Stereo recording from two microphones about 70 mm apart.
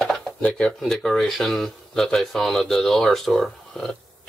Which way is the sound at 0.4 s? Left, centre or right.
Centre.